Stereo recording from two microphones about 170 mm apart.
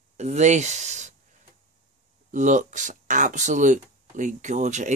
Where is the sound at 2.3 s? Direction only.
45° right (ahead or behind).